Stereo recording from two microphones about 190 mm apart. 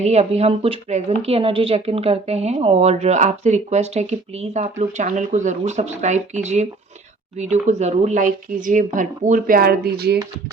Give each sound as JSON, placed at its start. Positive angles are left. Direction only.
{"t": 0.0, "sound": "speech", "side_deg": -35}